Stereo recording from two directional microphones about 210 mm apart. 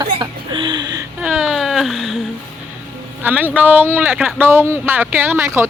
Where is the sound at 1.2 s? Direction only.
5° right (ahead or behind).